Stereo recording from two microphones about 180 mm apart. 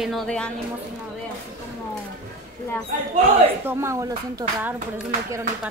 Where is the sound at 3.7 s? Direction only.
15° right (ahead or behind).